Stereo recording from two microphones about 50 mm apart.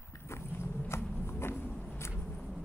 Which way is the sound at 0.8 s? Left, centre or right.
Left.